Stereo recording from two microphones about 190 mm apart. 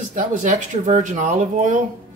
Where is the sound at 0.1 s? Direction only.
40° right (ahead or behind).